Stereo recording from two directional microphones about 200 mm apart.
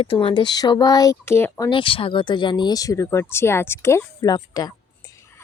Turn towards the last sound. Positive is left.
turn(degrees=20)  # may be behind; listen again after turning